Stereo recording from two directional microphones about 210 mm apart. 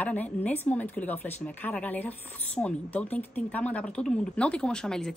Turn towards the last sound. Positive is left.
turn(degrees=5)  # may be behind; listen again after turning